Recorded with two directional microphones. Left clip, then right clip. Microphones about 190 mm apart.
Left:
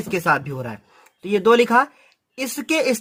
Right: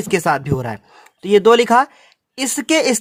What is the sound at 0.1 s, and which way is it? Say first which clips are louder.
Speech: right 3 dB; 45° right (ahead or behind).